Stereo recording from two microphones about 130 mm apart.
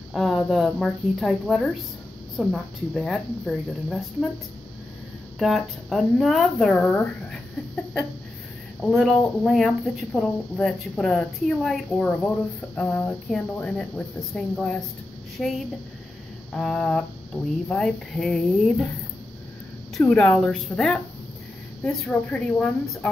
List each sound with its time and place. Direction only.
0.1 s a woman's voice: centre (ahead or behind)
5.4 s a woman's voice: centre (ahead or behind)
8.8 s a woman's voice: centre (ahead or behind)
20.0 s a woman's voice: 10° left (ahead or behind)